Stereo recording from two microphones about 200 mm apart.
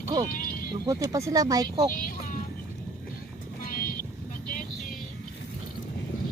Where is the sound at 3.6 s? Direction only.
45° left (ahead or behind).